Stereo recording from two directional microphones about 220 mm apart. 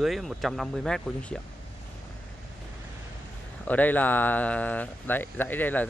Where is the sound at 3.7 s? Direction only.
5° left (ahead or behind).